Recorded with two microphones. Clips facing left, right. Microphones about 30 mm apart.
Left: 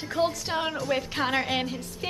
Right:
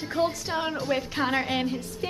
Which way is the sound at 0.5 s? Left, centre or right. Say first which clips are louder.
Even; centre.